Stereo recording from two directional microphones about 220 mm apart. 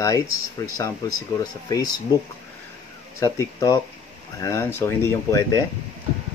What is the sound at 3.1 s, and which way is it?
Speech, 15° left (ahead or behind).